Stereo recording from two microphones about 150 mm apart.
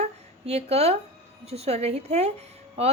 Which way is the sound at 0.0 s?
45° right (ahead or behind).